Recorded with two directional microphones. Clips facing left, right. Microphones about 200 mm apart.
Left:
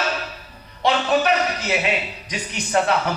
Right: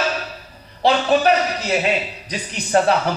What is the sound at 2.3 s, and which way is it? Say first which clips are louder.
Speech: right 3 dB; 35° right (ahead or behind).